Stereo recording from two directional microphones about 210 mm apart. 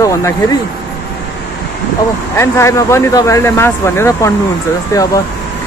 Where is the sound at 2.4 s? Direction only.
15° left (ahead or behind).